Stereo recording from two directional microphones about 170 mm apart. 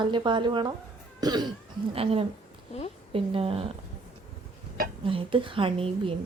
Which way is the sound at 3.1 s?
35° right (ahead or behind).